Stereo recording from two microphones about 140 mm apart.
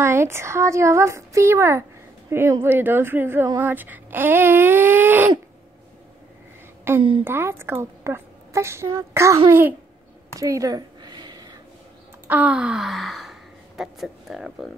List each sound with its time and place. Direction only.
0.0 s a woman's voice: 20° right (ahead or behind)
6.9 s speech: 15° right (ahead or behind)
10.4 s a sound: 25° right (ahead or behind)
12.3 s speech: 10° right (ahead or behind)